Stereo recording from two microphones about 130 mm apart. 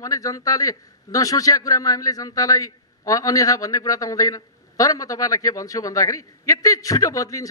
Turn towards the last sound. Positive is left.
turn(degrees=25)  # may be behind; listen again after turning